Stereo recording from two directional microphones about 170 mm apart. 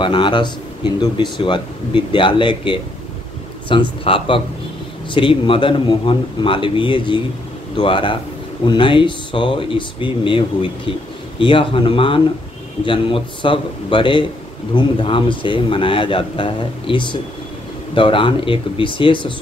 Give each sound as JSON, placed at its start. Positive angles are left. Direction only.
{"t": 0.0, "sound": "a man's voice", "side_deg": 30}